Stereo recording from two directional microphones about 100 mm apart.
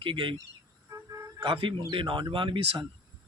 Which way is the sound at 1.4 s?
55° right (ahead or behind).